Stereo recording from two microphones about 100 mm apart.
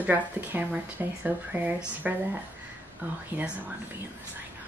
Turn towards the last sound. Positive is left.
turn(degrees=-15)  # may be behind; listen again after turning